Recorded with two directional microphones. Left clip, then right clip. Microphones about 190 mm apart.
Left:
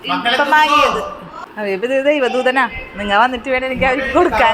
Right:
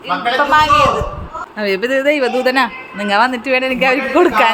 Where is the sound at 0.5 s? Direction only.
10° left (ahead or behind).